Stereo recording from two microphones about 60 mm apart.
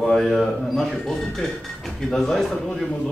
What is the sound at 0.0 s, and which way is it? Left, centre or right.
A man's voice, centre.